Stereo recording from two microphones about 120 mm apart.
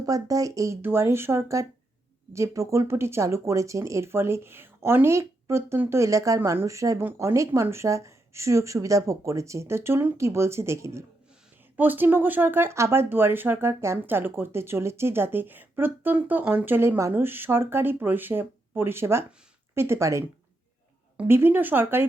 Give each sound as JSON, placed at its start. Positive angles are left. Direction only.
{"t": 0.0, "sound": "speech", "side_deg": -30}